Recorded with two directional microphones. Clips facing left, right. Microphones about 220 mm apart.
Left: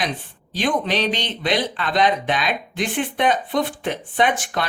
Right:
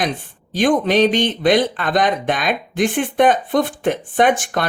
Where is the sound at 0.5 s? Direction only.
50° right (ahead or behind).